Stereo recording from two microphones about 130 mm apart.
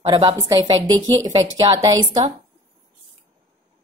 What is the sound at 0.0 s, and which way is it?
A woman's voice, 40° right (ahead or behind).